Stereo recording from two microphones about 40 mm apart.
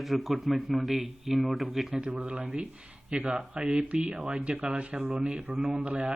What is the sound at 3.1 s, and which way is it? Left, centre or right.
A man's voice, right.